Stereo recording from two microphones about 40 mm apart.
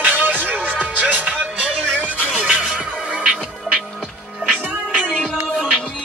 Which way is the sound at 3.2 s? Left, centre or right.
Right.